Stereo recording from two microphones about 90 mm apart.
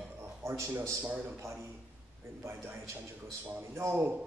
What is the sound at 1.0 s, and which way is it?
Speech, 15° right (ahead or behind).